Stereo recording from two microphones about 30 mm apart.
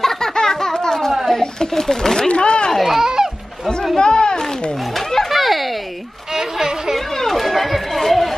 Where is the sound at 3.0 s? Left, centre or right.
Centre.